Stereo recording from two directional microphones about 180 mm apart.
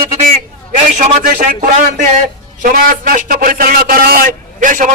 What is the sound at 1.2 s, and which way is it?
A man's voice, 50° right (ahead or behind).